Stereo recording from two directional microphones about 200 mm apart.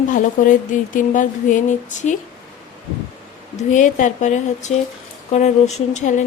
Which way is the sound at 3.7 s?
40° left (ahead or behind).